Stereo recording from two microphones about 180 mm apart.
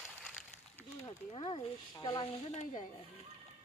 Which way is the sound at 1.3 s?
30° left (ahead or behind).